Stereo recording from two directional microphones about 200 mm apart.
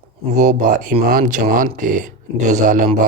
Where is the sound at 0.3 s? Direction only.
40° right (ahead or behind).